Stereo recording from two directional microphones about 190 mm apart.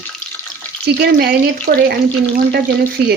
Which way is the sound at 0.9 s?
60° right (ahead or behind).